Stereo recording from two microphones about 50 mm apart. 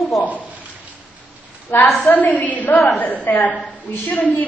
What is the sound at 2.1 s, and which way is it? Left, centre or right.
A woman's voice, left.